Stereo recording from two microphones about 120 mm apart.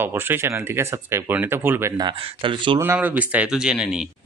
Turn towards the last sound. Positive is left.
turn(degrees=-5)  # may be behind; listen again after turning